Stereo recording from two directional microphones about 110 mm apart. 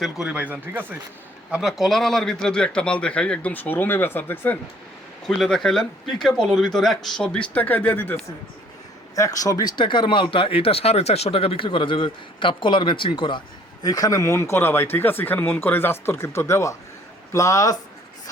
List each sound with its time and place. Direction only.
0.0 s speech: 5° right (ahead or behind)
1.5 s a man's voice: 5° right (ahead or behind); by 4.5 s 15° left (ahead or behind)
5.2 s speech: 5° left (ahead or behind)
9.1 s speech: 30° left (ahead or behind); by 13.4 s 50° left (ahead or behind)
13.8 s speech: 35° left (ahead or behind)